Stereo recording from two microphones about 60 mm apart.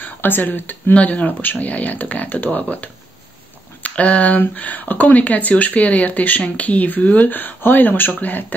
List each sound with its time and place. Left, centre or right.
0.0 s speech: left